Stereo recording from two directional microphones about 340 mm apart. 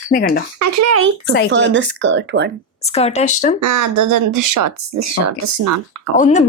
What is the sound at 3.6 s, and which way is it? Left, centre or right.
Speech, right.